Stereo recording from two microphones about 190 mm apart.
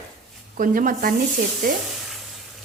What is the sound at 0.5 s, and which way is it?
Speech, 45° right (ahead or behind).